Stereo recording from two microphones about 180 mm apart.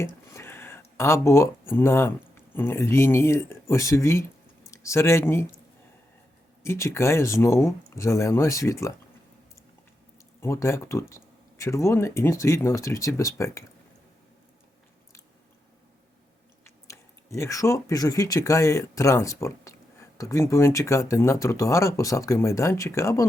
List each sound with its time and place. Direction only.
0.0 s speech: 15° left (ahead or behind)
6.6 s speech: 15° left (ahead or behind)
10.4 s speech: 15° left (ahead or behind)
16.6 s speech: 15° left (ahead or behind)